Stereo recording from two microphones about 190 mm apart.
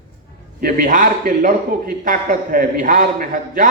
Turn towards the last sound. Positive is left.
turn(degrees=-45)  # may be behind; listen again after turning